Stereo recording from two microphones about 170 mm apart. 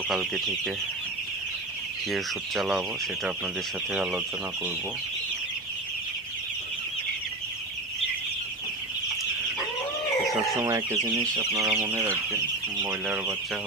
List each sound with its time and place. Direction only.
0.1 s speech: centre (ahead or behind)
2.0 s speech: centre (ahead or behind)
3.9 s speech: 5° right (ahead or behind)
10.6 s speech: 20° right (ahead or behind)